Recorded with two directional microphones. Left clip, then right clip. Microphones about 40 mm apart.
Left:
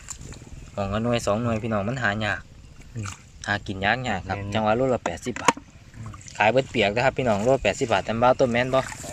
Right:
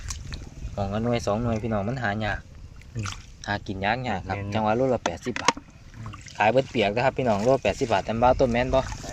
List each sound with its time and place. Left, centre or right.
0.8 s speech: left
3.4 s speech: left
5.3 s speech: centre
5.5 s water: right
6.3 s speech: centre
7.3 s speech: centre
7.9 s speech: centre